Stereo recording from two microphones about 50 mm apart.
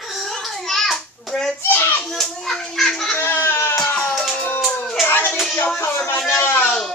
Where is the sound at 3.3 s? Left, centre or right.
Left.